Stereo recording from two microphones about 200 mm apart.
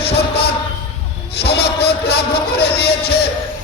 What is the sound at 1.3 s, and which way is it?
Speech, 55° left (ahead or behind).